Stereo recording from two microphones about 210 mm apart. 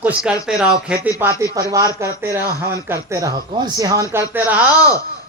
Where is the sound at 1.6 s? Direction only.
15° right (ahead or behind).